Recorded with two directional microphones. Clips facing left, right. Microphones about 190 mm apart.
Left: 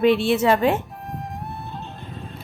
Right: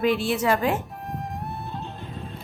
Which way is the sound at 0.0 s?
25° left (ahead or behind).